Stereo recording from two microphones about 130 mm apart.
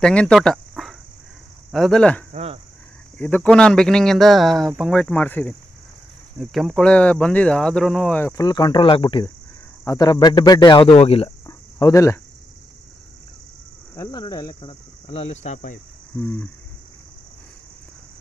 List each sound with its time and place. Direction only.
0.0 s speech: 5° left (ahead or behind)
2.3 s speech: 50° right (ahead or behind)
3.2 s speech: 10° left (ahead or behind)
6.5 s speech: centre (ahead or behind)
8.2 s speech: 20° left (ahead or behind)
8.5 s speech: 35° left (ahead or behind)
11.0 s speech: 50° left (ahead or behind)
11.4 s cricket: 25° left (ahead or behind)
13.9 s speech: 20° left (ahead or behind)
14.7 s speech: 45° left (ahead or behind)
16.2 s speech: 15° left (ahead or behind)